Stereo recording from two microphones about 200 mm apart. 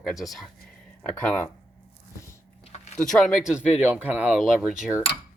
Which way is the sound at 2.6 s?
35° left (ahead or behind).